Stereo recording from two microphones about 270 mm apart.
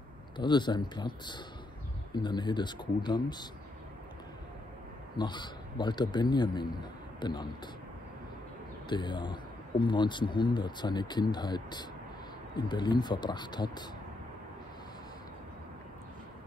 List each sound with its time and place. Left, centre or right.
0.4 s speech: centre
5.1 s speech: centre
8.8 s speech: centre